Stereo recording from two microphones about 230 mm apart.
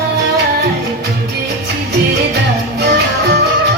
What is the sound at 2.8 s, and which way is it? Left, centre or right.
Music, right.